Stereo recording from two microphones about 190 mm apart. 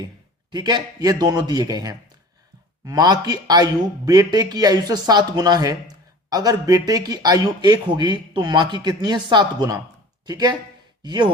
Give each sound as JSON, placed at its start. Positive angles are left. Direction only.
{"t": 0.5, "sound": "speech", "side_deg": -20}